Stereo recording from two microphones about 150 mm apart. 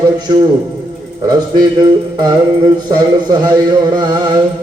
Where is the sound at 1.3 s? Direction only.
30° right (ahead or behind).